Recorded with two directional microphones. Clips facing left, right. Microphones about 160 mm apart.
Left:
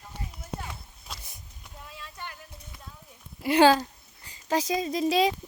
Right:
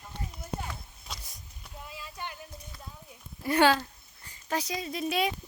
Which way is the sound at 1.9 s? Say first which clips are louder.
Right 1 dB; 5° right (ahead or behind).